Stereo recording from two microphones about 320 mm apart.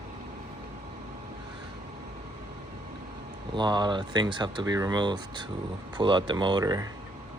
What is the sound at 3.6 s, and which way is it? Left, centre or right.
Speech, centre.